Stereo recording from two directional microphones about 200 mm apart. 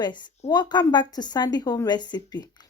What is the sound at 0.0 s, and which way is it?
A woman's voice, 20° left (ahead or behind).